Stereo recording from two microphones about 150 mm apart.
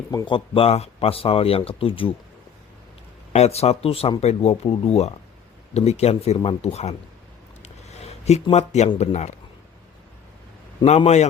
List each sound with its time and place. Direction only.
0.1 s speech: 25° left (ahead or behind)
3.3 s speech: 45° left (ahead or behind)
7.6 s a sound: 45° left (ahead or behind)
9.0 s speech: 50° left (ahead or behind)
10.8 s speech: 45° left (ahead or behind)